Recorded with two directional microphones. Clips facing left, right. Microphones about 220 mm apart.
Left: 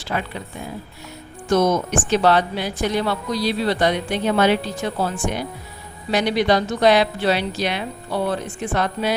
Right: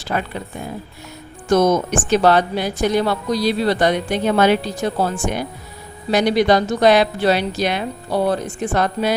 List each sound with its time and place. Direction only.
0.1 s speech: 45° right (ahead or behind)
6.1 s speech: 45° right (ahead or behind)